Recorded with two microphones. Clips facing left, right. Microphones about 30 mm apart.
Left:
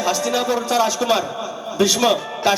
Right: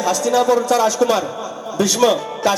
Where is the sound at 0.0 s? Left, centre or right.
Centre.